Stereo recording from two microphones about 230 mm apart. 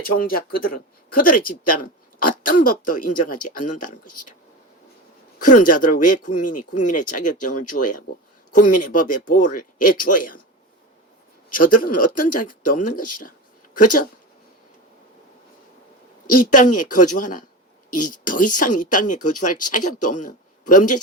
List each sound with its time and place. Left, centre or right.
0.0 s speech: left
5.4 s speech: left
11.5 s speech: left
16.2 s a woman's voice: left